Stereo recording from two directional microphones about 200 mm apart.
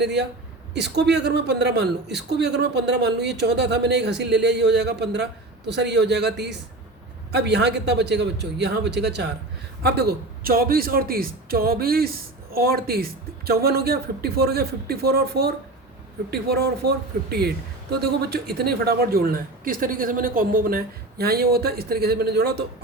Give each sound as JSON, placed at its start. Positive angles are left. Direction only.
{"t": 0.0, "sound": "a woman's voice", "side_deg": -60}
{"t": 7.3, "sound": "a woman's voice", "side_deg": -55}
{"t": 18.0, "sound": "speech", "side_deg": -50}